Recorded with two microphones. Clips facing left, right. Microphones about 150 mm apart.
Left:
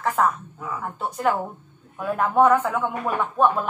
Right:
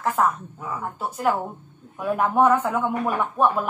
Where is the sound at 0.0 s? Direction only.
Centre (ahead or behind).